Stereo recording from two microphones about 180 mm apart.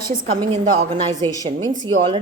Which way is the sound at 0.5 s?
30° right (ahead or behind).